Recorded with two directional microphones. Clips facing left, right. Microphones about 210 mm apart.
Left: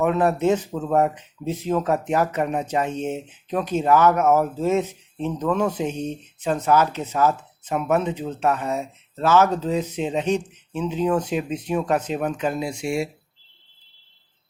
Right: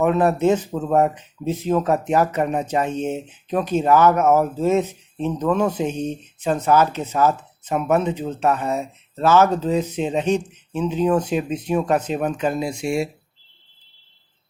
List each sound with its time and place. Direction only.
0.0 s speech: 35° right (ahead or behind)